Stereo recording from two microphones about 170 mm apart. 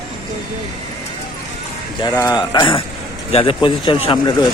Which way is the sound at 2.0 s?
20° left (ahead or behind).